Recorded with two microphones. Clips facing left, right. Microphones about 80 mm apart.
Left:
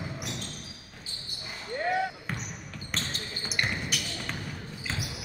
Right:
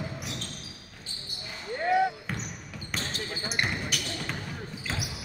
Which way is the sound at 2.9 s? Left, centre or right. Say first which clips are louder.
Right 2 dB; centre.